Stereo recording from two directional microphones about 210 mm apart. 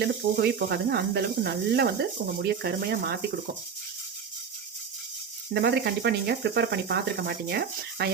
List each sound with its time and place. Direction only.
0.0 s speech: 50° right (ahead or behind)
5.5 s speech: 50° right (ahead or behind)